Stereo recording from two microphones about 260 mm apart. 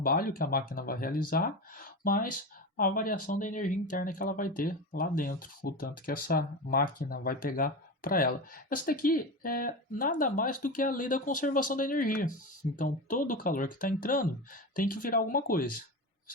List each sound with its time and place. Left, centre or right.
0.0 s speech: left